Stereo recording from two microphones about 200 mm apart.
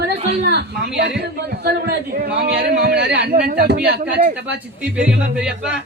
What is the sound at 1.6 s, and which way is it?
A man's voice, 50° right (ahead or behind).